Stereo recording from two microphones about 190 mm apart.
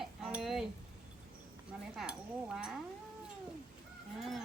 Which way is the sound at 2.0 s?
Centre (ahead or behind).